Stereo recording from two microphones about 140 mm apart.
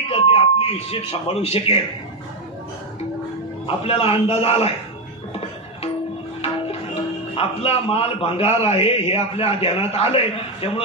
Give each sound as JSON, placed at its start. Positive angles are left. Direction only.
{"t": 0.1, "sound": "speech", "side_deg": 45}
{"t": 3.6, "sound": "speech", "side_deg": 45}
{"t": 6.4, "sound": "speech", "side_deg": 45}